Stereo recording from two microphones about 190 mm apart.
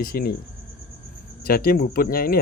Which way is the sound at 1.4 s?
50° left (ahead or behind).